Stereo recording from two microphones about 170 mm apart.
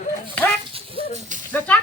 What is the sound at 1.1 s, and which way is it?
Speech, 45° right (ahead or behind).